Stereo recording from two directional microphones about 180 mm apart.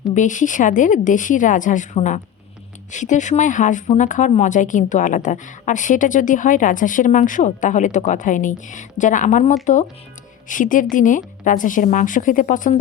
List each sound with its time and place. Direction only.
0.1 s speech: 45° left (ahead or behind)